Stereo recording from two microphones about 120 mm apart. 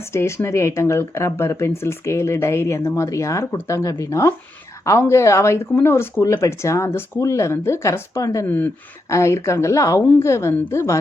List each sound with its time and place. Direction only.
0.1 s speech: 20° left (ahead or behind)
8.4 s speech: 15° left (ahead or behind)